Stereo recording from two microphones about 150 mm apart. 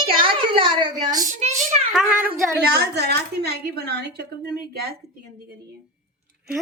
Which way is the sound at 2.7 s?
90° right.